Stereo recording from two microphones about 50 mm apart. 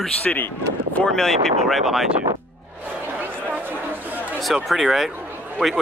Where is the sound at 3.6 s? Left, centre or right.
Right.